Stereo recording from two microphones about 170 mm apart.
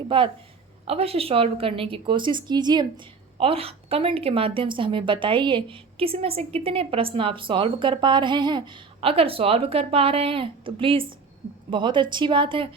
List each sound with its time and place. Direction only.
0.1 s a woman's voice: 30° right (ahead or behind)